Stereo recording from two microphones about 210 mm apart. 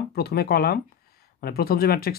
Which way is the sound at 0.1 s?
50° left (ahead or behind).